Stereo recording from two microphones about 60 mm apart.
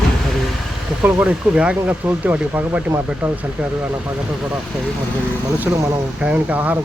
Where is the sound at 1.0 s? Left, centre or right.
Right.